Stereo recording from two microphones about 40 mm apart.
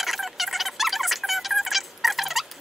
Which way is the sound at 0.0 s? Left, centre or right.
Centre.